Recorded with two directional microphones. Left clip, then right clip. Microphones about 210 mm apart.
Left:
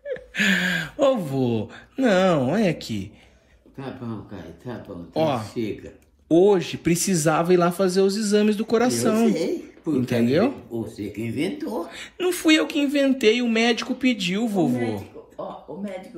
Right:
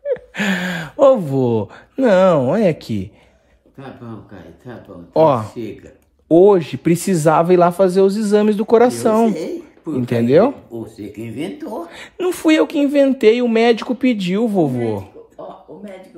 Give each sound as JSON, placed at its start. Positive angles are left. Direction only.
{"t": 0.1, "sound": "speech", "side_deg": -30}
{"t": 3.7, "sound": "speech", "side_deg": -10}
{"t": 4.3, "sound": "speech", "side_deg": 15}
{"t": 5.1, "sound": "a man's voice", "side_deg": -45}
{"t": 9.4, "sound": "speech", "side_deg": 0}
{"t": 9.9, "sound": "a man's voice", "side_deg": -45}
{"t": 10.7, "sound": "speech", "side_deg": -15}
{"t": 11.4, "sound": "a man's voice", "side_deg": -45}
{"t": 12.2, "sound": "a man's voice", "side_deg": -30}